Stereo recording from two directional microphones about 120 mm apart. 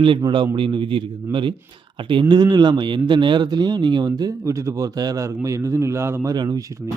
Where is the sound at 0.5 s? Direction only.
45° right (ahead or behind); by 6.3 s 20° right (ahead or behind).